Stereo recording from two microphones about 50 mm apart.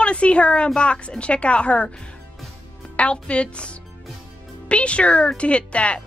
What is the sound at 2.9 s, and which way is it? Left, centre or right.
Speech, left.